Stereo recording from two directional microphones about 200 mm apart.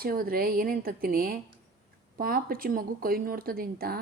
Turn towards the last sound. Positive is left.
turn(degrees=-50)  # may be behind; listen again after turning